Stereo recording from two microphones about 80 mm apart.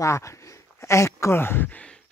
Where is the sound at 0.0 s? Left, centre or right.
Left.